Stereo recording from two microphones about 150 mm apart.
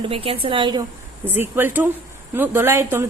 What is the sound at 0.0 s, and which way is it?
Speech, 40° right (ahead or behind).